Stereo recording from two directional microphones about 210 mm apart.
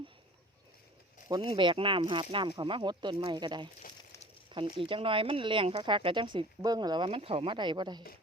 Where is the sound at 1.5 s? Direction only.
25° right (ahead or behind).